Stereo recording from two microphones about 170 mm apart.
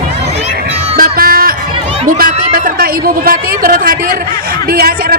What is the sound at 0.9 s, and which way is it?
Music, 60° right (ahead or behind).